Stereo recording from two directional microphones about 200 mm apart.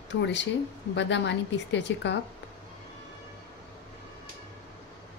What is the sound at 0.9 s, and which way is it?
A woman's voice, 60° left (ahead or behind).